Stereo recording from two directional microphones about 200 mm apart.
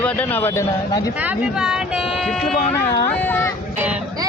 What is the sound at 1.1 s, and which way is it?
Speech, 5° right (ahead or behind).